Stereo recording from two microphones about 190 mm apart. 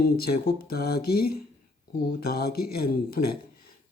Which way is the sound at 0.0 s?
55° left (ahead or behind).